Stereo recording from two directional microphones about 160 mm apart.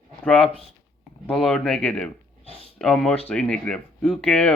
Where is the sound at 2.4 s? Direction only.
40° left (ahead or behind).